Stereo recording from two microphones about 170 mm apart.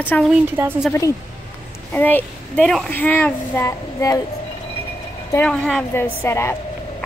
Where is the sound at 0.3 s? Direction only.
10° right (ahead or behind).